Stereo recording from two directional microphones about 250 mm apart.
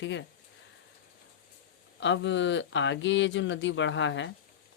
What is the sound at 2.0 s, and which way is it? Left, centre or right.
Speech, left.